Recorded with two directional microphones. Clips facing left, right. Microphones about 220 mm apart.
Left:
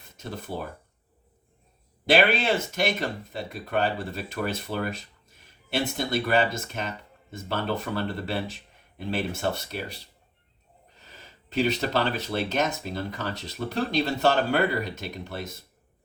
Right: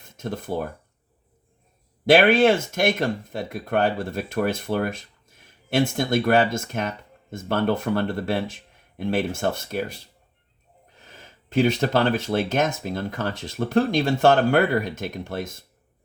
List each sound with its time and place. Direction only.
0.2 s speech: 50° right (ahead or behind)
2.0 s speech: 50° right (ahead or behind)
6.1 s speech: 50° right (ahead or behind)
11.4 s speech: 50° right (ahead or behind)